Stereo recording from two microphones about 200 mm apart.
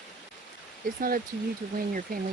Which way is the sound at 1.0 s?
45° right (ahead or behind).